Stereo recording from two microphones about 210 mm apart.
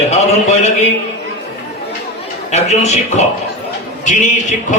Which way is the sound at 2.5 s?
30° left (ahead or behind).